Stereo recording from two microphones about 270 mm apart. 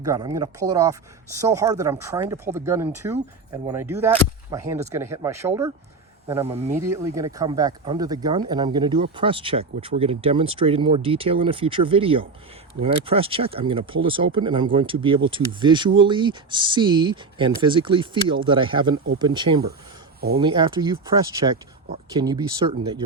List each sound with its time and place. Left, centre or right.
0.0 s speech: centre